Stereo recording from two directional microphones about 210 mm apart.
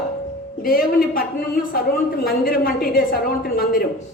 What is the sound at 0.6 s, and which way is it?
A woman's voice, 45° left (ahead or behind).